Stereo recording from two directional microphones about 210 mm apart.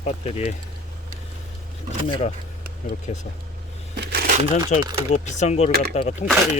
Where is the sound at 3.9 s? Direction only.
50° right (ahead or behind).